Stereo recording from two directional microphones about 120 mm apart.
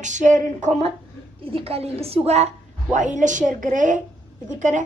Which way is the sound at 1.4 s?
50° right (ahead or behind).